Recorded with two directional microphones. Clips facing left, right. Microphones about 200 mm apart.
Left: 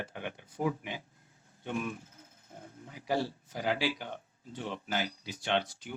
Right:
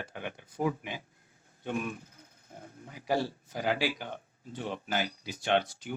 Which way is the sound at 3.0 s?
45° right (ahead or behind).